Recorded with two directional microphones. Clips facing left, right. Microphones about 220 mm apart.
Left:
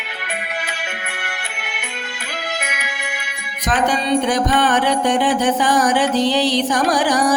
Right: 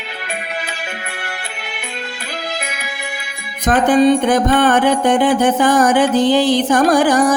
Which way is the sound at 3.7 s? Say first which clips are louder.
Right 7 dB; 55° right (ahead or behind).